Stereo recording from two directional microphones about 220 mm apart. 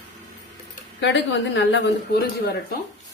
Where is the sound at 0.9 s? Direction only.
55° left (ahead or behind).